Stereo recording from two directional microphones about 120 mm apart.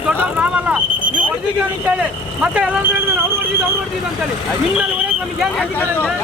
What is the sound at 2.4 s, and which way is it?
Speech, 10° right (ahead or behind).